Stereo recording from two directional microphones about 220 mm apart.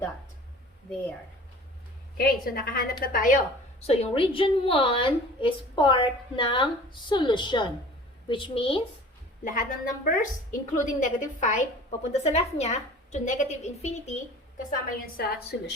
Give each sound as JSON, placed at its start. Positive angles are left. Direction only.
{"t": 2.1, "sound": "a woman's voice", "side_deg": 40}
{"t": 9.4, "sound": "a woman's voice", "side_deg": 35}
{"t": 15.0, "sound": "a woman's voice", "side_deg": 45}